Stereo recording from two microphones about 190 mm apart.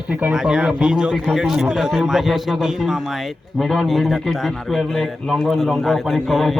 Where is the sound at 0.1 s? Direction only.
5° right (ahead or behind).